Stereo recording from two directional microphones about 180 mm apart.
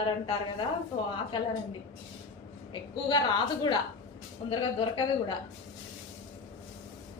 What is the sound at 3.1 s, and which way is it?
A woman's voice, 25° left (ahead or behind).